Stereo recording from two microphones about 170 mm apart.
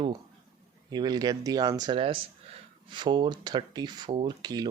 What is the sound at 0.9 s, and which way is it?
Speech, 25° right (ahead or behind).